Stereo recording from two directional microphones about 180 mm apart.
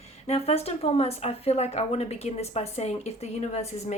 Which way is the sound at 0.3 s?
35° left (ahead or behind).